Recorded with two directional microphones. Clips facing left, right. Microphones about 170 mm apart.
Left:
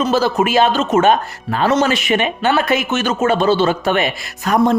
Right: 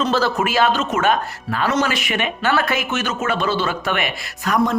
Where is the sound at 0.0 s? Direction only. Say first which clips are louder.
Left 4 dB; 10° left (ahead or behind).